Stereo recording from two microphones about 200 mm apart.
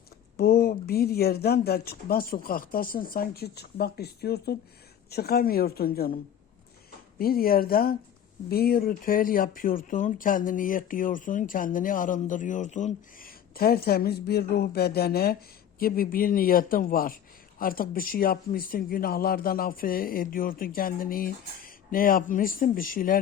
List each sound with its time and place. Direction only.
0.3 s speech: 50° left (ahead or behind)
7.2 s speech: 50° left (ahead or behind)